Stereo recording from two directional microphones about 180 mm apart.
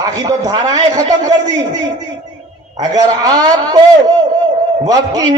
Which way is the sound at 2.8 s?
20° right (ahead or behind).